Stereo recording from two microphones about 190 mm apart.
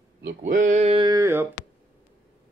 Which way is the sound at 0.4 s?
40° right (ahead or behind).